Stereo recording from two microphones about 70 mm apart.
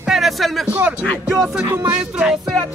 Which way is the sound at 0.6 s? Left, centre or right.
Centre.